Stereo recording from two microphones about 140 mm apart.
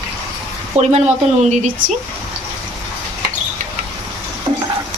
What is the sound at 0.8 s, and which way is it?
Speech, 50° right (ahead or behind).